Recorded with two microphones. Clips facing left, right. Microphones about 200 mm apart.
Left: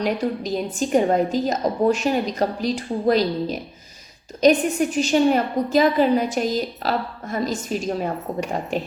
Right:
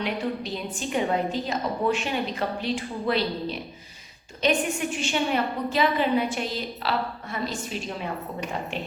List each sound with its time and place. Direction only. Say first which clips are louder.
0.0 s a woman's voice: left 5 dB; 40° left (ahead or behind)